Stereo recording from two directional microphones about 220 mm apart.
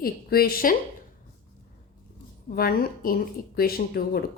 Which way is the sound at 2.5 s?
40° left (ahead or behind).